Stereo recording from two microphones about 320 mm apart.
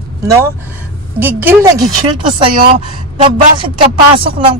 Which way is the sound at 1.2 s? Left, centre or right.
Centre.